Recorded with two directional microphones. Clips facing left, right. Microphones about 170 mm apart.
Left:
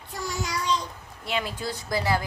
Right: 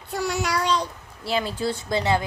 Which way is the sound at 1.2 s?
30° right (ahead or behind).